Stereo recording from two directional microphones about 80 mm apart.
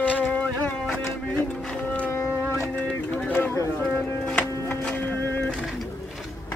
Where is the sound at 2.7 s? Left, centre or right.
Centre.